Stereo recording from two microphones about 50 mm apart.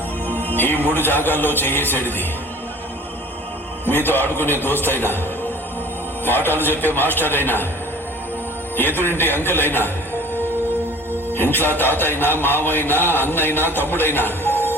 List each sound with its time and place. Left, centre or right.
0.3 s music: left
3.8 s music: left
8.7 s a man's voice: left
9.0 s music: left
11.8 s music: left